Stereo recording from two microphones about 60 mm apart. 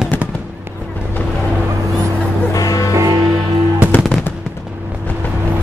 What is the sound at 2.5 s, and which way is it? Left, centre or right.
Music, left.